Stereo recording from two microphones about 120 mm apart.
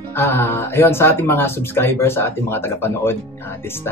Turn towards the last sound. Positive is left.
turn(degrees=20)  # may be behind; listen again after turning